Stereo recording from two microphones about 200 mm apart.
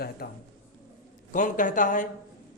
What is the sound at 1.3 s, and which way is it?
Speech, 40° left (ahead or behind).